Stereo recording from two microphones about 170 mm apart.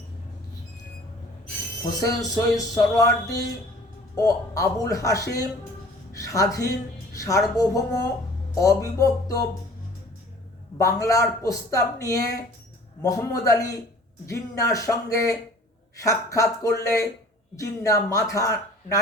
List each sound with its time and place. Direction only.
2.0 s speech: 20° left (ahead or behind)
10.8 s speech: 20° left (ahead or behind)